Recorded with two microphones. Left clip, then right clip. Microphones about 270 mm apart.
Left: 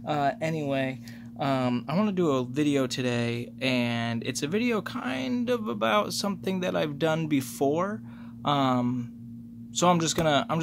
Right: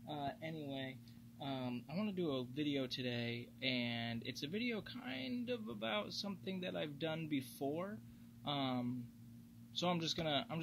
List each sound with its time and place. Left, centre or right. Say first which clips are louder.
0.0 s speech: left 18 dB; centre
2.0 s speech: left 13 dB; centre